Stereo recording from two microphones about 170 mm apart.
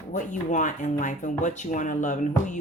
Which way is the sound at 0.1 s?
45° left (ahead or behind).